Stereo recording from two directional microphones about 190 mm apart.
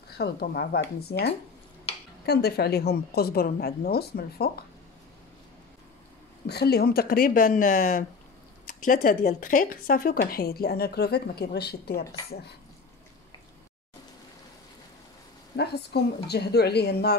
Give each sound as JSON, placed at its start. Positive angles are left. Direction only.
{"t": 0.2, "sound": "a woman's voice", "side_deg": 55}
{"t": 6.4, "sound": "speech", "side_deg": 60}
{"t": 15.5, "sound": "a woman's voice", "side_deg": 60}